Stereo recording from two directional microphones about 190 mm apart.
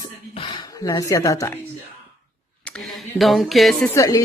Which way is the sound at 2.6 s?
Centre (ahead or behind).